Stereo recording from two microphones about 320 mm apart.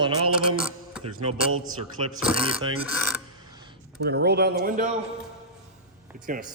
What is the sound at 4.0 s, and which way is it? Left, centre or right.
Speech, right.